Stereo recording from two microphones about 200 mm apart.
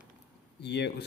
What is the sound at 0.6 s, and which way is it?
Speech, 55° left (ahead or behind).